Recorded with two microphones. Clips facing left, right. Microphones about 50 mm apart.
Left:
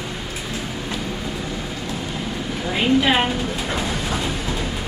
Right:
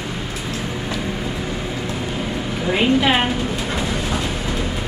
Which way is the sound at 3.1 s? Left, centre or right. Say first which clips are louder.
Right 1 dB; centre.